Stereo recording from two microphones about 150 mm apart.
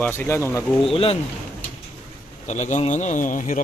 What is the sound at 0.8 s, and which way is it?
Speech, 40° left (ahead or behind).